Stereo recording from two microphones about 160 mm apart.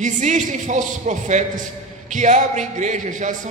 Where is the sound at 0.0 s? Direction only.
50° right (ahead or behind).